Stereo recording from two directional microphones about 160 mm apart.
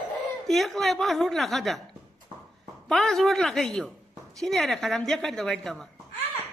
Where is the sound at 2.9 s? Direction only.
5° left (ahead or behind).